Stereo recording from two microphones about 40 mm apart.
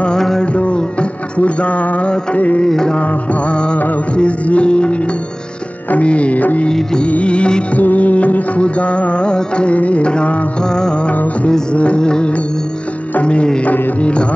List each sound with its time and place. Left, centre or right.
0.6 s music: left
1.4 s speech: left
2.6 s music: centre
3.0 s music: left
6.0 s speech: left
6.7 s music: centre
7.1 s music: left
7.7 s music: left; by 11.0 s centre
11.7 s music: left
12.0 s music: centre
13.2 s speech: left